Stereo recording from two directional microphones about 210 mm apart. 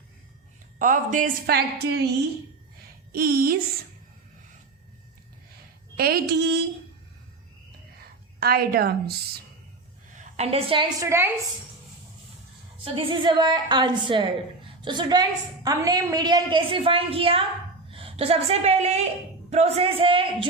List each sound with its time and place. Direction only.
0.8 s a woman's voice: 40° right (ahead or behind)
3.1 s a woman's voice: 45° right (ahead or behind)
6.0 s a woman's voice: 45° right (ahead or behind)
8.4 s a woman's voice: 45° right (ahead or behind)
10.2 s a woman's voice: 30° right (ahead or behind); by 11.3 s 15° right (ahead or behind)
12.8 s a woman's voice: 25° right (ahead or behind)